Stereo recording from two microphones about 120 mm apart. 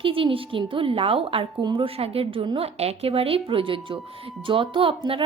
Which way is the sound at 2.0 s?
55° right (ahead or behind).